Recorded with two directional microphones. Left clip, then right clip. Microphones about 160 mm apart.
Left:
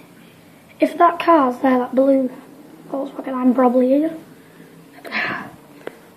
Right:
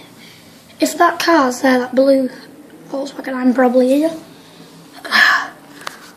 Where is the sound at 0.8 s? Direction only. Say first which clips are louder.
Right 1 dB; 5° right (ahead or behind).